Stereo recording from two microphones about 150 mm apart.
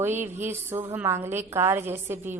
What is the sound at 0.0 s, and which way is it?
A woman's voice, 15° right (ahead or behind).